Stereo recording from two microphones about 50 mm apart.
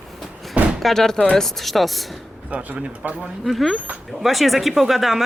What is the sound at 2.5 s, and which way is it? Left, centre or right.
Speech, right.